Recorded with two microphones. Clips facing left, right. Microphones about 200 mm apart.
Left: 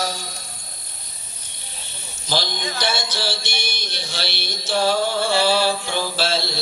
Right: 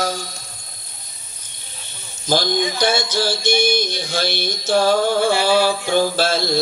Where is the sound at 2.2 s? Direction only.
50° right (ahead or behind).